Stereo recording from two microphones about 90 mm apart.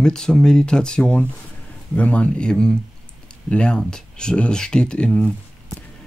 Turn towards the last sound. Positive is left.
turn(degrees=10)  # may be behind; listen again after turning